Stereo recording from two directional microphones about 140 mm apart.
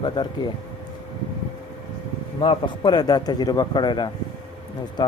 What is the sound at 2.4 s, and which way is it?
A man's voice, 35° left (ahead or behind).